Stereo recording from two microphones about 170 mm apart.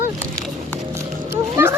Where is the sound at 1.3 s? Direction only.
15° right (ahead or behind).